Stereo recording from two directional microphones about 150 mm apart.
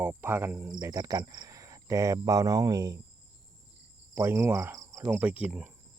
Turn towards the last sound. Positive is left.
turn(degrees=-10)  # may be behind; listen again after turning